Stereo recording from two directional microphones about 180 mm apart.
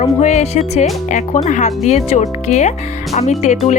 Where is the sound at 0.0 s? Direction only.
40° left (ahead or behind).